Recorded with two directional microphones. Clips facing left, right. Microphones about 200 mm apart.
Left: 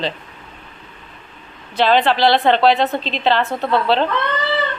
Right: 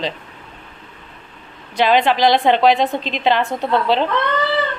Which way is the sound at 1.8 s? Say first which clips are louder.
Even; 10° right (ahead or behind).